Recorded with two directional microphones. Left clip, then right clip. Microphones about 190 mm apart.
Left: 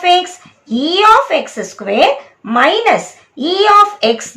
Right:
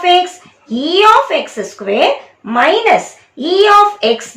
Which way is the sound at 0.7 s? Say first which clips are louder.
Even; 5° left (ahead or behind).